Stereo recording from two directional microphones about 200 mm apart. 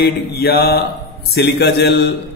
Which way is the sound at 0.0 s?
55° left (ahead or behind).